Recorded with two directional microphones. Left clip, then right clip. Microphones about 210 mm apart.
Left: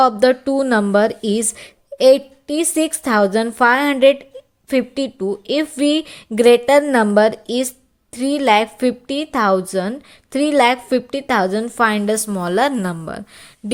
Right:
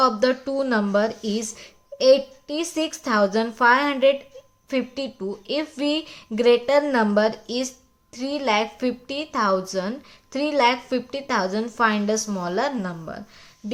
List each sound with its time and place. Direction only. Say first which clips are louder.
0.0 s a woman's voice: left 6 dB; 30° left (ahead or behind)